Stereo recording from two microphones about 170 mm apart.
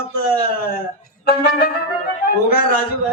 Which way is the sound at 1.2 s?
65° left (ahead or behind).